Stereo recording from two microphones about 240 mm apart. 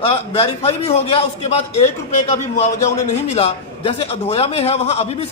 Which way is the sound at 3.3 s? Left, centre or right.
Left.